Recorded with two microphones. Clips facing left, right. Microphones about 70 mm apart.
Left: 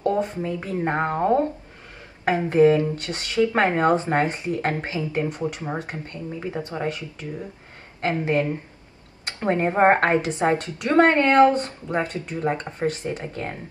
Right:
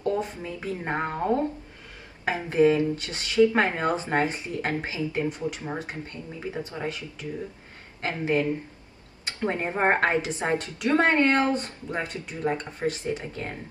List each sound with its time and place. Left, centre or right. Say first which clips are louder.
0.0 s speech: left 5 dB; left
8.0 s speech: left 3 dB; left